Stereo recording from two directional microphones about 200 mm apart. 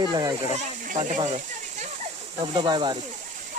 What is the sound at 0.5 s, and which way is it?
Speech, 35° right (ahead or behind).